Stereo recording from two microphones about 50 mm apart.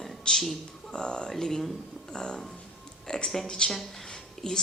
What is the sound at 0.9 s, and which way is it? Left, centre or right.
Speech, centre.